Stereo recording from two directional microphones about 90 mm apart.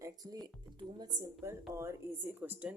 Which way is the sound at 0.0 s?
45° right (ahead or behind).